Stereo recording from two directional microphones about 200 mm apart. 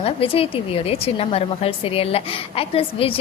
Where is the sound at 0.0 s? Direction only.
30° left (ahead or behind).